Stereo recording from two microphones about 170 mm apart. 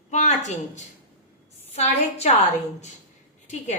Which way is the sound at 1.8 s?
40° left (ahead or behind).